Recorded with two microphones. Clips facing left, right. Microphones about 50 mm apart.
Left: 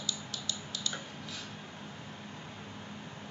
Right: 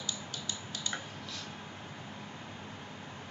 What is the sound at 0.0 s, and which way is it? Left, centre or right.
Music, right.